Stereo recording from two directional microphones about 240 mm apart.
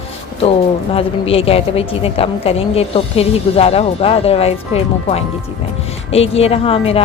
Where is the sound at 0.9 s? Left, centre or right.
Left.